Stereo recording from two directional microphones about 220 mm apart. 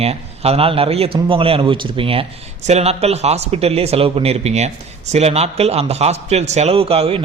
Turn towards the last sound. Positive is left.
turn(degrees=-25)  # may be behind; listen again after turning